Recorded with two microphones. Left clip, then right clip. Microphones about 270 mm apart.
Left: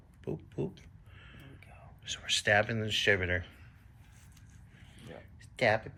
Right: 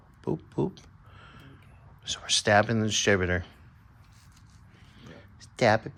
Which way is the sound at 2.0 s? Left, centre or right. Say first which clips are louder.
Right 4 dB; centre.